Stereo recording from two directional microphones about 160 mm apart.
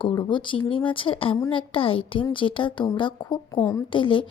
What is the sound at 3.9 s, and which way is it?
Speech, 30° left (ahead or behind).